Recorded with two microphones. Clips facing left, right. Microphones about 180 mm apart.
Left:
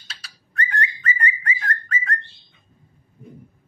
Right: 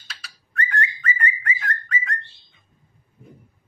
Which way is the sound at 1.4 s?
40° left (ahead or behind).